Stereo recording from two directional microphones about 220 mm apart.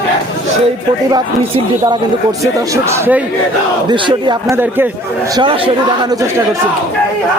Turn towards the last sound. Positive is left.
turn(degrees=-20)  # may be behind; listen again after turning